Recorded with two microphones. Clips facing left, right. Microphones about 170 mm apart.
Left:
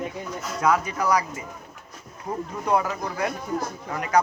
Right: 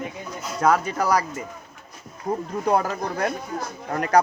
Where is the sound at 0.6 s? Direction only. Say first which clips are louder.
Right 2 dB; 30° right (ahead or behind).